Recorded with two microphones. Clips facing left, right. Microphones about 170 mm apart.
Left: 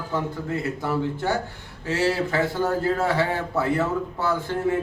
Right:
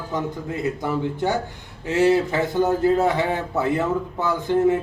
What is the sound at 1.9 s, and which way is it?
A man's voice, 20° right (ahead or behind).